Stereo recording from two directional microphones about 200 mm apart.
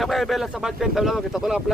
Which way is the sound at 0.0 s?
Centre (ahead or behind).